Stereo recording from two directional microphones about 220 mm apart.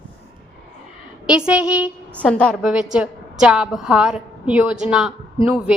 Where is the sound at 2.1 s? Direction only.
5° left (ahead or behind).